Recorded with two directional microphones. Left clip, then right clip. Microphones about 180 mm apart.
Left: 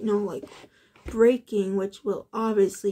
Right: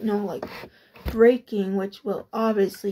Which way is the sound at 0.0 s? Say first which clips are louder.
Even; 25° left (ahead or behind).